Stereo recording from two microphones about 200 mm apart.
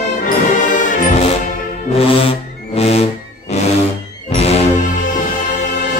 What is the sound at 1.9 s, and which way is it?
Music, 30° left (ahead or behind).